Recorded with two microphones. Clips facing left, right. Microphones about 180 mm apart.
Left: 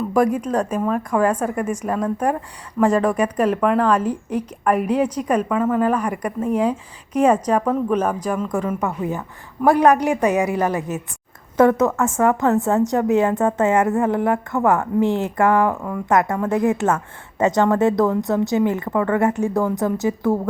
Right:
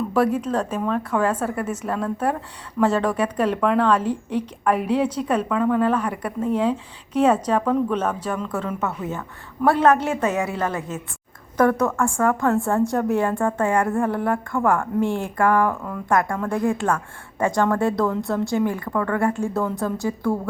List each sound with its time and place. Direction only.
0.1 s a woman's voice: 10° left (ahead or behind)
17.4 s a woman's voice: 20° left (ahead or behind)